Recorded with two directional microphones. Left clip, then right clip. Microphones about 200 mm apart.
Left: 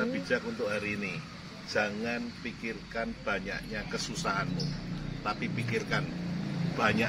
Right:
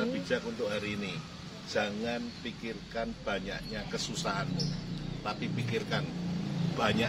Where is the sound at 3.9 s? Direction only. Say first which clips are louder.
Left 2 dB; centre (ahead or behind).